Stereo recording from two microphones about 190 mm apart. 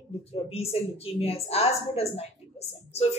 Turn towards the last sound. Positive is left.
turn(degrees=35)  # may be behind; listen again after turning